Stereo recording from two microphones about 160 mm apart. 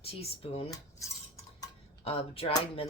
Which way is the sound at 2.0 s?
35° left (ahead or behind).